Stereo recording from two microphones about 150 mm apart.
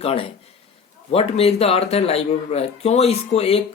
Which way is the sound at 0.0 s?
40° left (ahead or behind).